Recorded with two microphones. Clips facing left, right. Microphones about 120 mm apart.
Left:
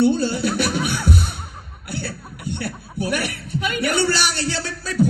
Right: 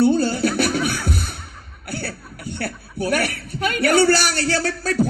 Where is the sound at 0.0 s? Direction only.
50° right (ahead or behind).